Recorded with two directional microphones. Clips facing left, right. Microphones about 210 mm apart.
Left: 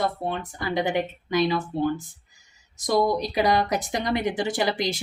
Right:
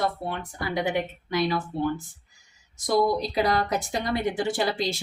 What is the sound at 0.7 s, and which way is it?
Speech, 20° left (ahead or behind).